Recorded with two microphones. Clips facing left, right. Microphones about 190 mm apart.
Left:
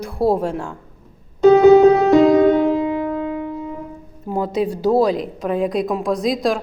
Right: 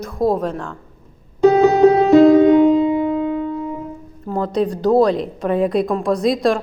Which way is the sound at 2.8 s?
25° right (ahead or behind).